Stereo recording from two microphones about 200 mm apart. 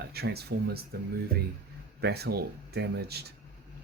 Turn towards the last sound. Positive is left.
turn(degrees=-55)  # may be behind; listen again after turning